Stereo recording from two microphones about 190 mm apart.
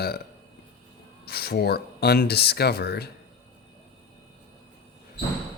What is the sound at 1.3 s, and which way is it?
Speech, 55° left (ahead or behind).